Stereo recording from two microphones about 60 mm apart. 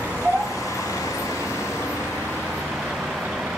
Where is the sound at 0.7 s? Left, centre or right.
Left.